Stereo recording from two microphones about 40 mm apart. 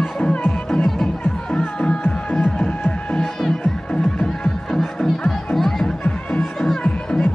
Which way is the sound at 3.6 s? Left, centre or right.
Left.